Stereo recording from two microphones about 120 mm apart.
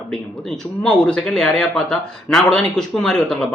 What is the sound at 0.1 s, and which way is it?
Speech, 5° left (ahead or behind).